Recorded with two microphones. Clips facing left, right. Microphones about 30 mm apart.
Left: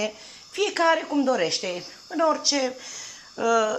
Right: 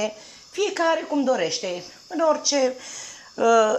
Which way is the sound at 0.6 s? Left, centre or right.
Left.